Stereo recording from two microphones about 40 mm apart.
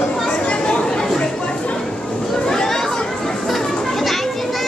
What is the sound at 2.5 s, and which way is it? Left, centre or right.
Chatter, centre.